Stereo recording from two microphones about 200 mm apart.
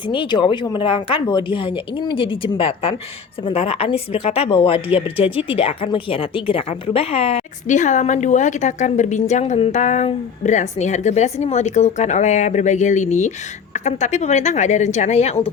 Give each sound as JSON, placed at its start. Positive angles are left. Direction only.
{"t": 0.0, "sound": "a woman's voice", "side_deg": 25}